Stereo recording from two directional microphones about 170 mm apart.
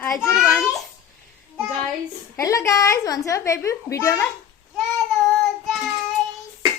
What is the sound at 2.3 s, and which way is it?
A woman's voice, 20° left (ahead or behind).